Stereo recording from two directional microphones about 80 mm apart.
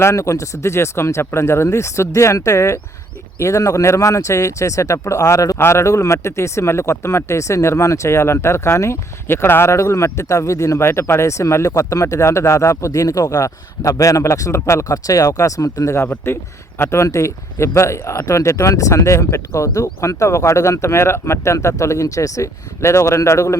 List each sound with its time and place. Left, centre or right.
0.0 s speech: left
16.2 s speech: left